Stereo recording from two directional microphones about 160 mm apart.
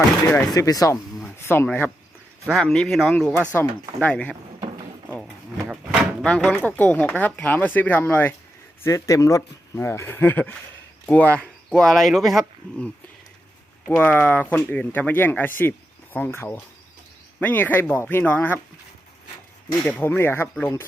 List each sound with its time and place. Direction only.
0.3 s speech: 15° left (ahead or behind)
2.5 s speech: centre (ahead or behind)
5.6 s a sound: 5° right (ahead or behind)
6.2 s speech: 5° left (ahead or behind)
13.8 s speech: 10° left (ahead or behind)
20.0 s speech: 15° left (ahead or behind)